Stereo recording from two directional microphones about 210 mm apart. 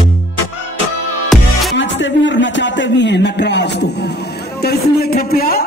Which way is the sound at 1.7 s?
60° left (ahead or behind).